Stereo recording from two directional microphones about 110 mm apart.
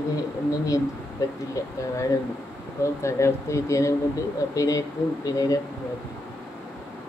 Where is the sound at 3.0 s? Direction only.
25° left (ahead or behind).